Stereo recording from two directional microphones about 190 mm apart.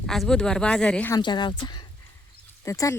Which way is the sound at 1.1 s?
25° left (ahead or behind).